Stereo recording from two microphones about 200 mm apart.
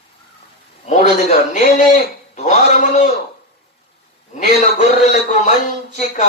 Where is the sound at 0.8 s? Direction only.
35° left (ahead or behind).